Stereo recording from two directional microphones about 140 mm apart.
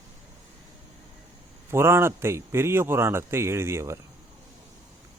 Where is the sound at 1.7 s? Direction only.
20° right (ahead or behind).